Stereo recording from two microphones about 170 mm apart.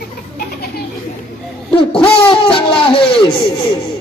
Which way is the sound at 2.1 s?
30° left (ahead or behind).